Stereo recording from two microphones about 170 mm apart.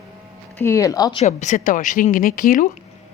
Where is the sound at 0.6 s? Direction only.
15° left (ahead or behind).